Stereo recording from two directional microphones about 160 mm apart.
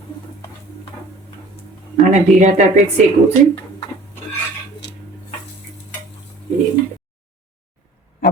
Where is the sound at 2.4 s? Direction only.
45° right (ahead or behind).